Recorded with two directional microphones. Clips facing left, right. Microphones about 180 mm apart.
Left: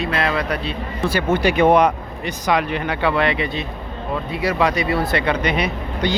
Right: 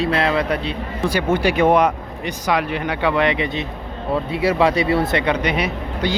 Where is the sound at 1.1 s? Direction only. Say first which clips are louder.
Even; 15° right (ahead or behind).